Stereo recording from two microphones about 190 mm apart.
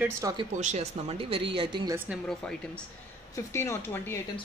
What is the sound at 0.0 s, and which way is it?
Speech, 20° right (ahead or behind).